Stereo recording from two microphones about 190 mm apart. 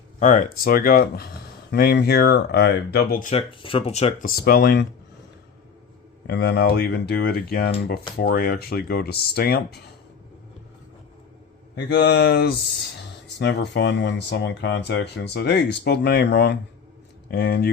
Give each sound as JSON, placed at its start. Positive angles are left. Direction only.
{"t": 0.2, "sound": "speech", "side_deg": 40}
{"t": 3.6, "sound": "speech", "side_deg": 30}
{"t": 4.3, "sound": "speech", "side_deg": 50}
{"t": 6.2, "sound": "speech", "side_deg": 60}
{"t": 11.9, "sound": "speech", "side_deg": 60}